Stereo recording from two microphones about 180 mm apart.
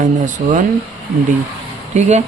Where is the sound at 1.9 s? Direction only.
40° right (ahead or behind).